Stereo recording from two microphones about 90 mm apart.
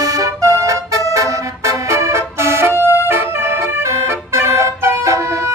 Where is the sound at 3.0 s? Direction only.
25° right (ahead or behind).